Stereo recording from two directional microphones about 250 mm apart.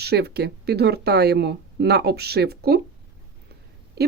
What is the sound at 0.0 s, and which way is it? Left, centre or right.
Speech, right.